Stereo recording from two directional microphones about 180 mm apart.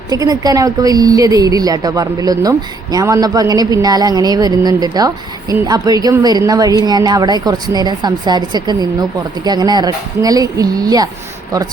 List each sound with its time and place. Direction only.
0.1 s a woman's voice: 20° right (ahead or behind)